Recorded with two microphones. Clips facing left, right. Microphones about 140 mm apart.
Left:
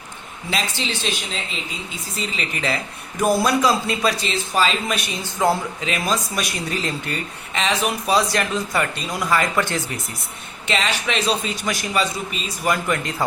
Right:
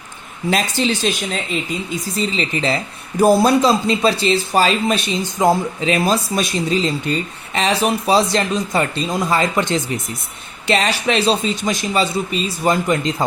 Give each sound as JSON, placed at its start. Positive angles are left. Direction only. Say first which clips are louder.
{"t": 0.5, "sound": "speech", "louder": "right 7 dB", "side_deg": -45}
{"t": 2.1, "sound": "speech", "louder": "right 6 dB", "side_deg": -35}
{"t": 4.9, "sound": "speech", "louder": "right 5 dB", "side_deg": -20}
{"t": 5.8, "sound": "speech", "louder": "right 6 dB", "side_deg": -35}
{"t": 7.5, "sound": "speech", "louder": "right 5 dB", "side_deg": -35}
{"t": 10.7, "sound": "speech", "louder": "right 6 dB", "side_deg": -35}